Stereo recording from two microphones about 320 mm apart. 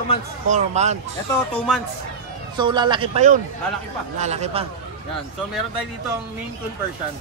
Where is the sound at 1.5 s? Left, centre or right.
Centre.